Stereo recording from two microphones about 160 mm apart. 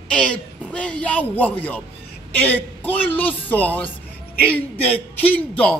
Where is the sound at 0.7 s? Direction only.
10° left (ahead or behind).